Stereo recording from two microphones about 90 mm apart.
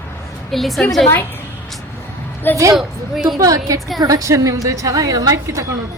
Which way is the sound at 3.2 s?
40° right (ahead or behind).